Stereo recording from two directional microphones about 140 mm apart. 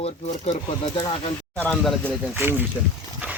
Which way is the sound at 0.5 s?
40° left (ahead or behind).